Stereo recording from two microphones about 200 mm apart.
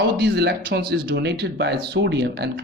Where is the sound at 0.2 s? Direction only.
55° right (ahead or behind).